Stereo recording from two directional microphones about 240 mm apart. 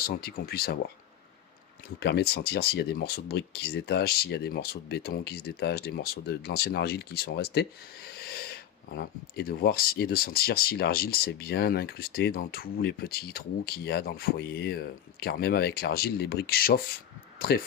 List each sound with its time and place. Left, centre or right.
0.2 s speech: left
2.0 s speech: left